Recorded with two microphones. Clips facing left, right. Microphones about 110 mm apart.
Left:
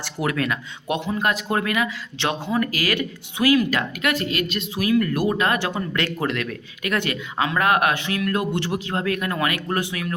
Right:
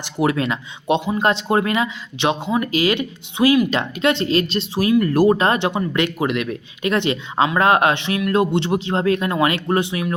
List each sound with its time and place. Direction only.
0.0 s speech: 25° right (ahead or behind)